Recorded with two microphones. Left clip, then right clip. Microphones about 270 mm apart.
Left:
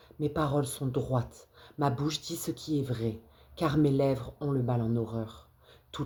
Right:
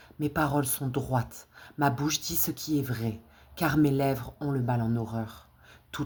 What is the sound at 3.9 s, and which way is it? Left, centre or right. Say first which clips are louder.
Speech: even; right.